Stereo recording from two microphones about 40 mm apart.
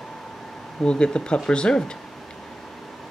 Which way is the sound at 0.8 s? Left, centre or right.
Left.